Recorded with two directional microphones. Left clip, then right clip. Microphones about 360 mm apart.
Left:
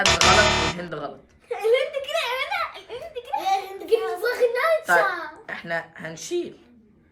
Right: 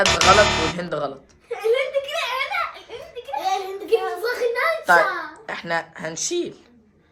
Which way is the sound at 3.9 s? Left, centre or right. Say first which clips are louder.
Right 1 dB; centre.